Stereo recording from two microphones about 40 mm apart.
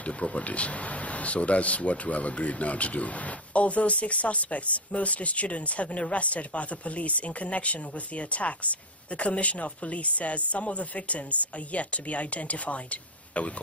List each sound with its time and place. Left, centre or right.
0.0 s speech: left